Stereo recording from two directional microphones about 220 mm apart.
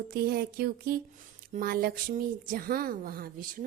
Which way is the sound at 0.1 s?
45° right (ahead or behind).